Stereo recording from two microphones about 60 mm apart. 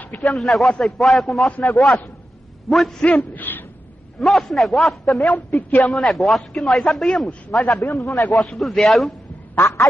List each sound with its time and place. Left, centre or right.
0.2 s a man's voice: centre
3.3 s a sound: left
4.2 s a man's voice: centre
5.3 s a woman's voice: left
5.8 s a man's voice: centre
7.8 s a man's voice: left
8.1 s a man's voice: centre